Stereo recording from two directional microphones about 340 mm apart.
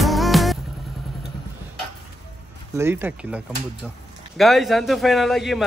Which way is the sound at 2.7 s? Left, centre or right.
Centre.